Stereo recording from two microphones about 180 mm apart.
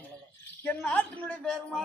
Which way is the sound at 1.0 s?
10° left (ahead or behind).